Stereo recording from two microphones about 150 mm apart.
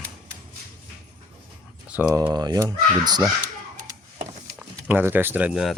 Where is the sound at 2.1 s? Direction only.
20° right (ahead or behind).